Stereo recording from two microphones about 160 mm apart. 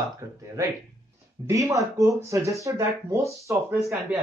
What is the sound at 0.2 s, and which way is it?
Speech, 20° right (ahead or behind).